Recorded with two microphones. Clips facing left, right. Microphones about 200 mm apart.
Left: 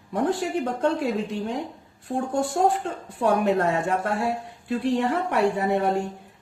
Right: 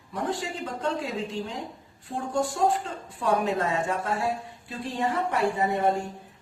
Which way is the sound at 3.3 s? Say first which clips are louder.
Left 4 dB; 65° left (ahead or behind).